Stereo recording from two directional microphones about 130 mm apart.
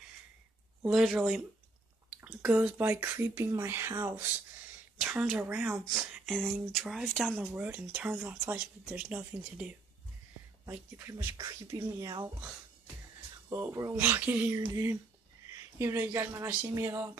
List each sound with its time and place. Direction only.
0.8 s speech: centre (ahead or behind)
2.0 s speech: 10° right (ahead or behind)
6.2 s speech: centre (ahead or behind)
7.4 s speech: 15° right (ahead or behind)
11.3 s speech: 30° right (ahead or behind)
13.5 s speech: 20° right (ahead or behind)